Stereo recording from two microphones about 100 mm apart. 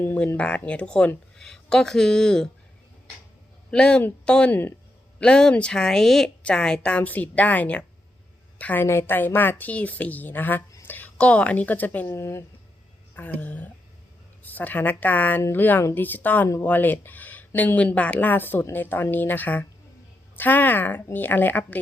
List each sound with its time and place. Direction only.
0.0 s speech: 20° left (ahead or behind)
3.7 s a woman's voice: 10° left (ahead or behind)
12.0 s speech: 30° left (ahead or behind)
13.1 s speech: 15° left (ahead or behind)